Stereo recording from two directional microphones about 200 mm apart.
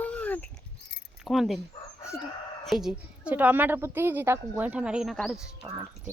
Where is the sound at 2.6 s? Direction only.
Centre (ahead or behind).